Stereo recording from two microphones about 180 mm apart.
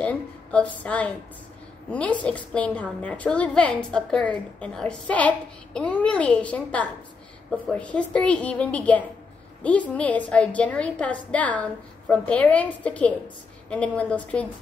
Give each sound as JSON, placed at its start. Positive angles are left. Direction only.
{"t": 0.0, "sound": "a woman's voice", "side_deg": 5}